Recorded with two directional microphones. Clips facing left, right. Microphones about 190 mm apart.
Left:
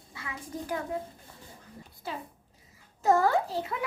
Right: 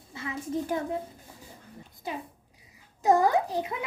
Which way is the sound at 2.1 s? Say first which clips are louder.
Right 2 dB; 20° right (ahead or behind).